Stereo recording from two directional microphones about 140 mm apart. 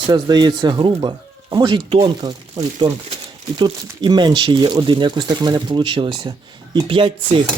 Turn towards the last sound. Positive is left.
turn(degrees=-35)  # may be behind; listen again after turning